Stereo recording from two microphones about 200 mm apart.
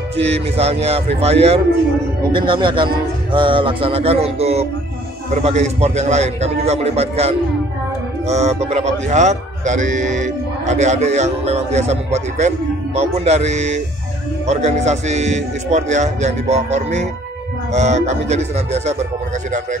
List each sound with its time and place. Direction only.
0.2 s speech: 30° right (ahead or behind)
2.3 s music: 25° right (ahead or behind)
5.3 s speech: 35° right (ahead or behind)